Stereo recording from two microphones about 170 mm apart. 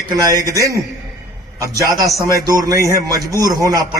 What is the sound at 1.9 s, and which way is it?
A man's voice, 20° right (ahead or behind).